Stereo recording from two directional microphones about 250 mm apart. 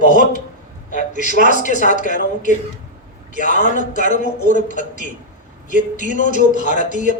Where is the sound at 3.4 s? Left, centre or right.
Left.